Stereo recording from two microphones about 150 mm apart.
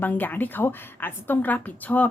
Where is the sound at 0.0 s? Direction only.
10° left (ahead or behind).